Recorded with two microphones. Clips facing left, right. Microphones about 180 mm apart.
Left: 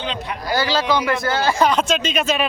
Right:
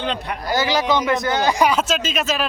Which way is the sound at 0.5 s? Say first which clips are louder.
Even; 15° right (ahead or behind).